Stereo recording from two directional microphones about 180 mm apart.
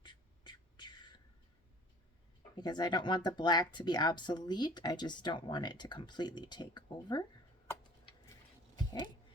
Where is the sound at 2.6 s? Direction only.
25° left (ahead or behind).